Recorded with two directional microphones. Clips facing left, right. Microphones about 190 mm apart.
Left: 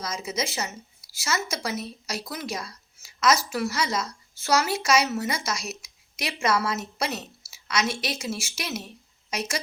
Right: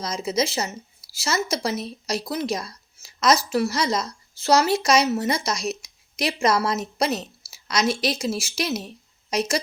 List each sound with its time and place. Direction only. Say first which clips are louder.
0.0 s a woman's voice: right 6 dB; 35° right (ahead or behind)